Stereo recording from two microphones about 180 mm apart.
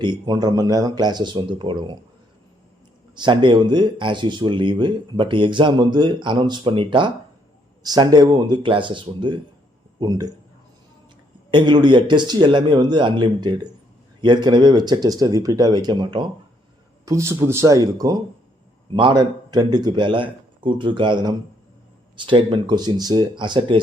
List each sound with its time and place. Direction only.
0.0 s speech: 25° right (ahead or behind)
3.2 s speech: 25° right (ahead or behind)
11.5 s speech: 25° right (ahead or behind)